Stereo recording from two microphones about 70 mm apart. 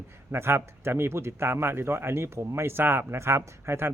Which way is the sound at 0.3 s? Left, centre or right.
Right.